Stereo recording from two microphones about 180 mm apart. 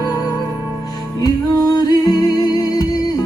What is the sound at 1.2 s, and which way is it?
Music, 20° left (ahead or behind).